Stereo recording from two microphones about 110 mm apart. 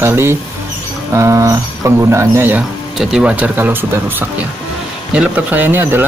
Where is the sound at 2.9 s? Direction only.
5° right (ahead or behind); by 6.0 s 20° right (ahead or behind).